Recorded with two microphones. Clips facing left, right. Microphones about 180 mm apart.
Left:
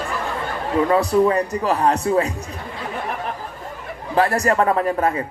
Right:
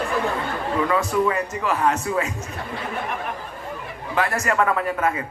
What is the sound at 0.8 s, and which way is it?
Speech, 35° left (ahead or behind).